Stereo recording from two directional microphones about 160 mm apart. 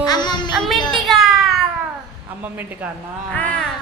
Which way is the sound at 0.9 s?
Centre (ahead or behind).